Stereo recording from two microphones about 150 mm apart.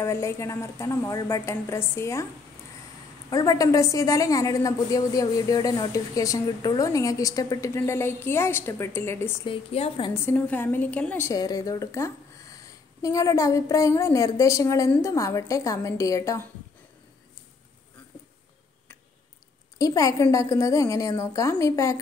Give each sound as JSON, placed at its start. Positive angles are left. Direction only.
{"t": 0.0, "sound": "a woman's voice", "side_deg": 20}
{"t": 3.3, "sound": "a woman's voice", "side_deg": 25}
{"t": 9.4, "sound": "a woman's voice", "side_deg": 40}
{"t": 10.2, "sound": "a woman's voice", "side_deg": 10}
{"t": 11.3, "sound": "a woman's voice", "side_deg": 25}
{"t": 19.8, "sound": "a woman's voice", "side_deg": 25}